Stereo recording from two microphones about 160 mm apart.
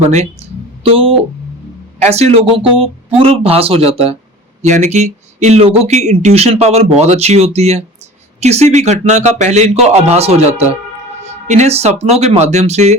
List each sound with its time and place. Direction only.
0.1 s speech: 45° right (ahead or behind)